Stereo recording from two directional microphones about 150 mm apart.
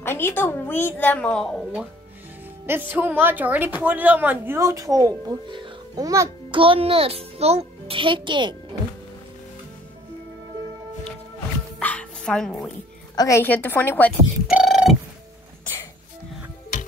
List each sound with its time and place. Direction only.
0.0 s a woman's voice: 15° left (ahead or behind)
2.6 s a woman's voice: 15° right (ahead or behind)
6.6 s a child's voice: 35° right (ahead or behind)
11.8 s bow-wow: 10° left (ahead or behind)
13.1 s a woman's voice: 25° left (ahead or behind)
13.4 s a woman's voice: 10° left (ahead or behind)
14.5 s music: 5° right (ahead or behind)